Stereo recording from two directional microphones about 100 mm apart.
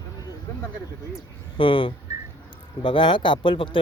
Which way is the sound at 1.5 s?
60° left (ahead or behind).